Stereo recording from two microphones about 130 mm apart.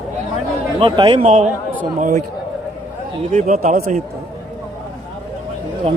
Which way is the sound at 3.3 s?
65° right (ahead or behind).